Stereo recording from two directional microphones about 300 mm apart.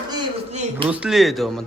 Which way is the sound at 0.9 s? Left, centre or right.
Centre.